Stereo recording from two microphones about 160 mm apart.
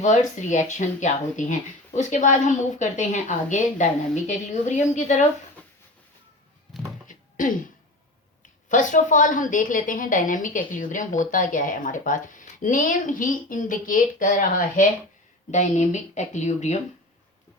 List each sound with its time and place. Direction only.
0.0 s a woman's voice: 50° left (ahead or behind)
7.3 s a woman's voice: 55° left (ahead or behind)
8.7 s a woman's voice: 50° left (ahead or behind)